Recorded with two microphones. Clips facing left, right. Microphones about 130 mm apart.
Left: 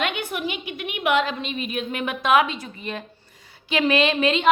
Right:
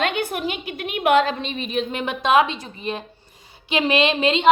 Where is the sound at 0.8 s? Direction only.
35° right (ahead or behind).